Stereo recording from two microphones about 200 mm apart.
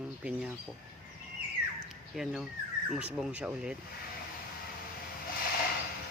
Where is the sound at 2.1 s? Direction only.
Centre (ahead or behind).